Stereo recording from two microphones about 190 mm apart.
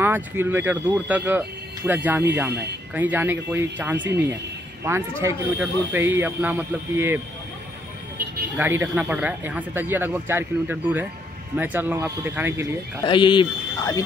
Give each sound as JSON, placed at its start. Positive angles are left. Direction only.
{"t": 0.0, "sound": "speech", "side_deg": -10}
{"t": 8.5, "sound": "speech", "side_deg": -10}
{"t": 13.0, "sound": "a man's voice", "side_deg": 25}